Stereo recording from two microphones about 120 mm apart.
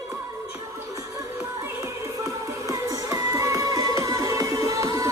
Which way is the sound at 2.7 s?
30° right (ahead or behind).